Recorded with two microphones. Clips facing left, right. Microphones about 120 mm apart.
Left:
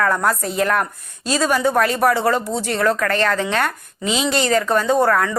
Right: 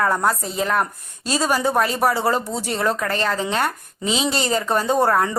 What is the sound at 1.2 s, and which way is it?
Speech, 35° right (ahead or behind).